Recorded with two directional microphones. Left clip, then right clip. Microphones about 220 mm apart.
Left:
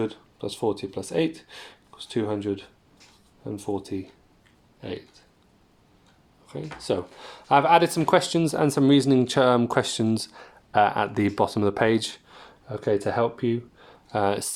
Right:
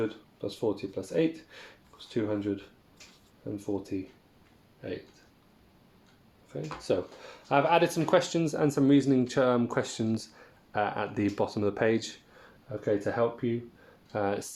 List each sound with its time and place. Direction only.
0.0 s speech: 40° left (ahead or behind)
6.5 s speech: 40° left (ahead or behind)